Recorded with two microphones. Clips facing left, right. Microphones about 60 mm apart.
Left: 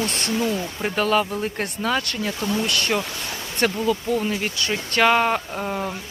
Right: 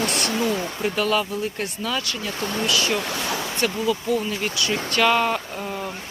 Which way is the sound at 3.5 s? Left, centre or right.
Left.